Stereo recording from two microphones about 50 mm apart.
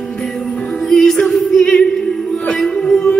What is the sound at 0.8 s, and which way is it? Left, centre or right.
A capella, centre.